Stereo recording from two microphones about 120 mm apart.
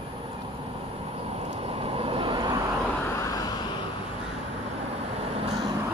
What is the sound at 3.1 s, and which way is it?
Vehicle, 30° left (ahead or behind).